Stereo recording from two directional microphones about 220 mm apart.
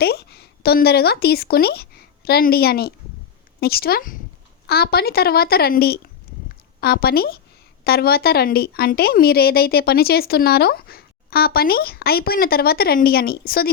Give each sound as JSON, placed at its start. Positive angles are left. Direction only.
{"t": 0.0, "sound": "a woman's voice", "side_deg": 45}
{"t": 6.3, "sound": "a sound", "side_deg": 45}
{"t": 6.7, "sound": "a woman's voice", "side_deg": 45}